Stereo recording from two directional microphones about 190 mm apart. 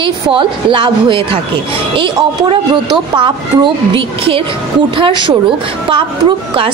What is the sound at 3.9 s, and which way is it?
A woman's voice, 30° right (ahead or behind).